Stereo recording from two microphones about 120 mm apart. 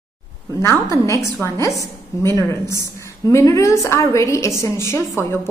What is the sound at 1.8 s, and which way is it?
Speech, 25° left (ahead or behind).